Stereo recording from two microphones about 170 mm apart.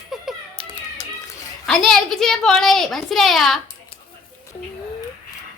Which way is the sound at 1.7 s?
5° left (ahead or behind).